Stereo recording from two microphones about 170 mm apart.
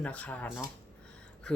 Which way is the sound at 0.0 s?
10° left (ahead or behind).